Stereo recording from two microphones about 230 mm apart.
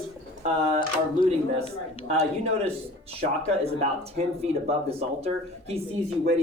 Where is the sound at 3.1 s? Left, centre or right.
Right.